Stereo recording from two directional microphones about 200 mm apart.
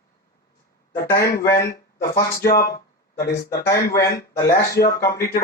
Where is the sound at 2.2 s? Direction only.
50° left (ahead or behind).